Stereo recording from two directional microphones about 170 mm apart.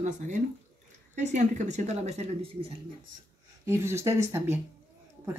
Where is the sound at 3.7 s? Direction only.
15° right (ahead or behind).